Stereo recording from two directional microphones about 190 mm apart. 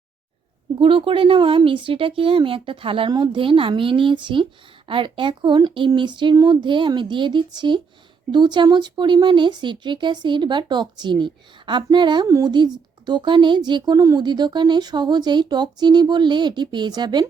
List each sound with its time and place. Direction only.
0.8 s speech: 30° right (ahead or behind)